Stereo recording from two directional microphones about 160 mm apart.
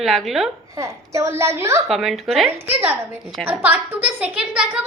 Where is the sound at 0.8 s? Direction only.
20° right (ahead or behind).